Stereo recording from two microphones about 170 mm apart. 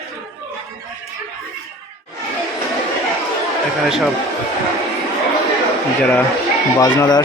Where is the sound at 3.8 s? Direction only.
Centre (ahead or behind).